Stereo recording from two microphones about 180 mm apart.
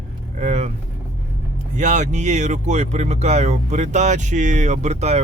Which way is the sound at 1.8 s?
40° right (ahead or behind).